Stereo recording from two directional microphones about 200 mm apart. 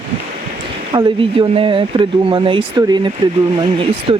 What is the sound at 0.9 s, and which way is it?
Speech, 25° right (ahead or behind).